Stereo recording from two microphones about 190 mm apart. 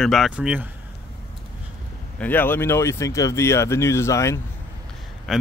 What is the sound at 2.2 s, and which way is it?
Speech, 10° left (ahead or behind).